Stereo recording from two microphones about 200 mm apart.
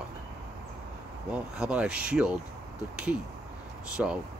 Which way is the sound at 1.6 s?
5° right (ahead or behind).